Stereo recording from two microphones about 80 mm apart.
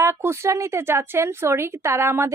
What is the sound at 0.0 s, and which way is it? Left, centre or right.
A woman's voice, right.